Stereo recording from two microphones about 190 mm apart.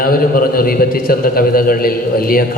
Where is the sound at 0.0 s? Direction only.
50° left (ahead or behind).